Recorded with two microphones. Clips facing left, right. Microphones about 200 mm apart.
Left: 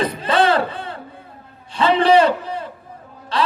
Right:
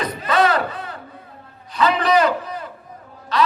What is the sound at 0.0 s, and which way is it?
Music, 30° left (ahead or behind).